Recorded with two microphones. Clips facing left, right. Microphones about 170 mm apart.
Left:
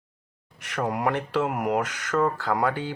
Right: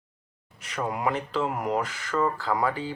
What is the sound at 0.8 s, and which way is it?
Speech, 55° left (ahead or behind).